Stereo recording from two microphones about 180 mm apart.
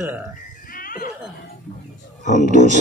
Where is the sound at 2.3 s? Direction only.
40° right (ahead or behind).